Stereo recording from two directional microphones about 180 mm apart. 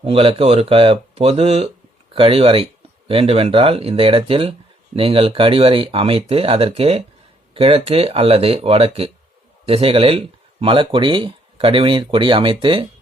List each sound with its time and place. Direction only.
0.0 s speech: 30° right (ahead or behind)